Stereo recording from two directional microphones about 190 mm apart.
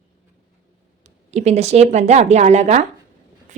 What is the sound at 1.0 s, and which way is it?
Speech, 35° right (ahead or behind).